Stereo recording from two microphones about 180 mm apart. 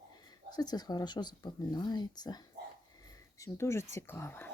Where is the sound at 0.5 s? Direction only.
20° left (ahead or behind).